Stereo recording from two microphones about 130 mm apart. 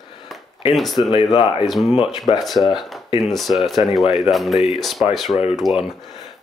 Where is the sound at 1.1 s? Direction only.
45° left (ahead or behind).